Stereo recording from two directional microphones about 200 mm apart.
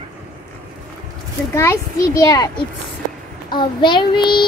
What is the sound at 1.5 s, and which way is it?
A child's voice, 15° left (ahead or behind).